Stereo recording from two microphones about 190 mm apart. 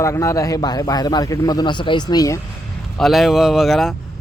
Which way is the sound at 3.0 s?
Centre (ahead or behind).